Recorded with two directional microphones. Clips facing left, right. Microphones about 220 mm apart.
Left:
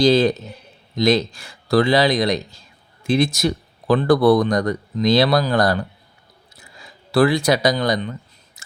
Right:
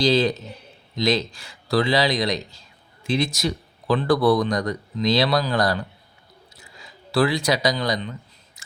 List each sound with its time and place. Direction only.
0.0 s speech: 50° left (ahead or behind)
7.1 s speech: 50° left (ahead or behind)